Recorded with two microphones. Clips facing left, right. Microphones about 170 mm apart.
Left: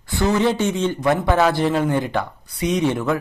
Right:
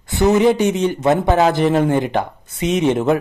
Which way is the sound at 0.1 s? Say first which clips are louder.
Right 5 dB; 20° right (ahead or behind).